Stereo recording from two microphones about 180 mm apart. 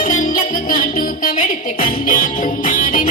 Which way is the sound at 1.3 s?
50° left (ahead or behind).